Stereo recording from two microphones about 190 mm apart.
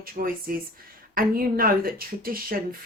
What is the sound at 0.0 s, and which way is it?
A woman's voice, 50° right (ahead or behind).